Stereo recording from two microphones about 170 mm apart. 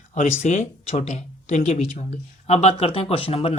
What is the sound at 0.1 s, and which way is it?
Speech, 45° left (ahead or behind).